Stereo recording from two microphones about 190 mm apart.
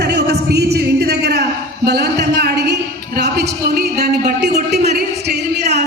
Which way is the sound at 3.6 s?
55° right (ahead or behind).